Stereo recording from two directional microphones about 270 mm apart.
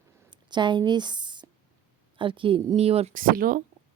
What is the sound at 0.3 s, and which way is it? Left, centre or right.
Speech, centre.